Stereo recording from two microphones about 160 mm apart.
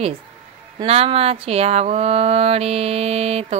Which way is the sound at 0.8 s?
40° right (ahead or behind).